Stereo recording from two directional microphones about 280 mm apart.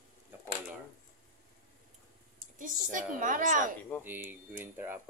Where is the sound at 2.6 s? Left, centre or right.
Right.